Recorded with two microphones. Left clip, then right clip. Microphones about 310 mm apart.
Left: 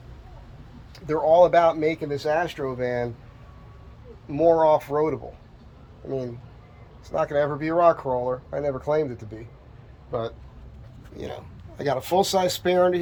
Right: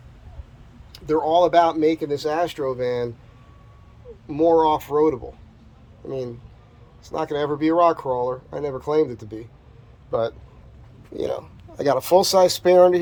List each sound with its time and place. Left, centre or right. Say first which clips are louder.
0.9 s speech: left 1 dB; centre
4.4 s speech: right 1 dB; centre
7.1 s speech: left 1 dB; centre
10.1 s a man's voice: right 6 dB; centre
11.9 s speech: right 5 dB; centre